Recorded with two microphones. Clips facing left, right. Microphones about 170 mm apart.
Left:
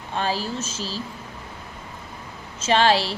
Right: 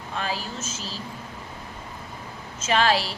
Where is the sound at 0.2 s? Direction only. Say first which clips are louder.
Left 5 dB; 35° left (ahead or behind).